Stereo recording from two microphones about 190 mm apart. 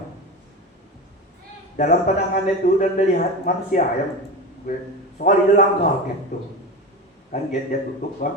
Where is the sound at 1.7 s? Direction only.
40° left (ahead or behind).